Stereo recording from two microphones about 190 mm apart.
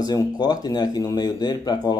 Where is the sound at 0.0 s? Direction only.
20° left (ahead or behind).